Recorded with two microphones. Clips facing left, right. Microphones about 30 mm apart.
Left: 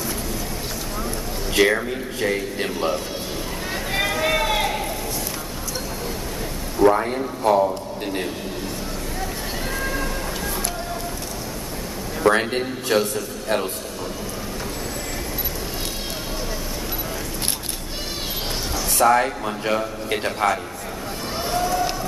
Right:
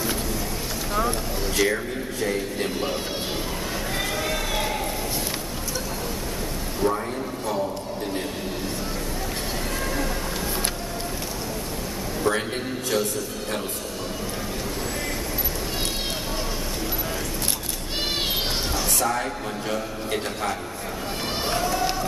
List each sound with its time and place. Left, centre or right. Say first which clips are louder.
1.5 s a man's voice: left 6 dB; left
4.2 s a sound: left 6 dB; left
6.8 s a man's voice: left 8 dB; left
12.2 s a man's voice: left 6 dB; left
18.9 s a man's voice: left 13 dB; left
21.5 s run: left 3 dB; centre